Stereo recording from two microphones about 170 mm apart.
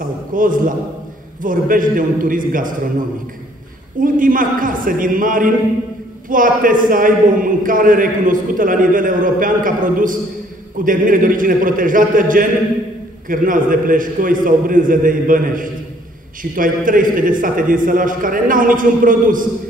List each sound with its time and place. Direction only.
0.3 s a man's voice: 55° right (ahead or behind)
4.0 s a man's voice: 55° right (ahead or behind)